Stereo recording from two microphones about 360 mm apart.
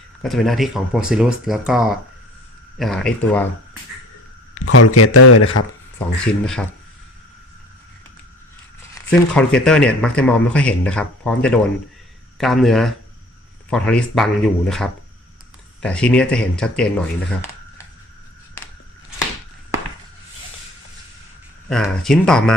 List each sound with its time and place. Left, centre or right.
0.2 s speech: centre
4.5 s speech: left
6.2 s speech: centre
9.0 s speech: centre
21.7 s speech: centre